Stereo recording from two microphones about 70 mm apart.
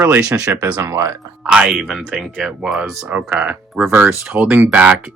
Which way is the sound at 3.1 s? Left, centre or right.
Centre.